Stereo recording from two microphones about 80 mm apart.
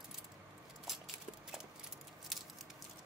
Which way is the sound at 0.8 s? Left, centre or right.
Centre.